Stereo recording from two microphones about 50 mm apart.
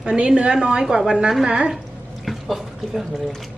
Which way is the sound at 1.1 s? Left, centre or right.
Centre.